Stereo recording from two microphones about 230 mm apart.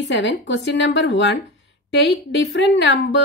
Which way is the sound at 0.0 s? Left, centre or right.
Left.